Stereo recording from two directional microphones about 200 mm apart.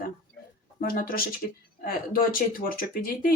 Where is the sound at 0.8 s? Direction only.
45° left (ahead or behind).